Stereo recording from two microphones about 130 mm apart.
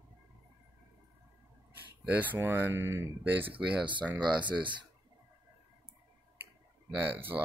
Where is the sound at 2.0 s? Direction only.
10° right (ahead or behind).